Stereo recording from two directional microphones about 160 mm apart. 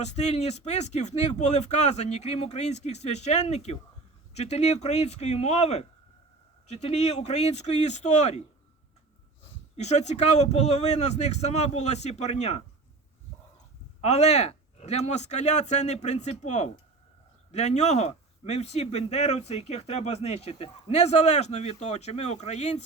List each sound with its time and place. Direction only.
0.0 s a man's voice: 45° left (ahead or behind)
9.7 s a man's voice: 45° left (ahead or behind)
14.0 s a man's voice: 45° left (ahead or behind)